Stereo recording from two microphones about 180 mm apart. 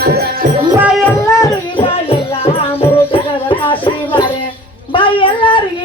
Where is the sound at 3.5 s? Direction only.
30° left (ahead or behind).